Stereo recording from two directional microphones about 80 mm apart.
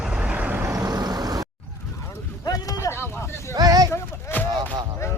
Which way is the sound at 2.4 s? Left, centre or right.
Left.